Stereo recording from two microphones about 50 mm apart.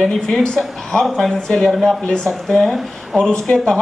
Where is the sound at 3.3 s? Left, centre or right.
Centre.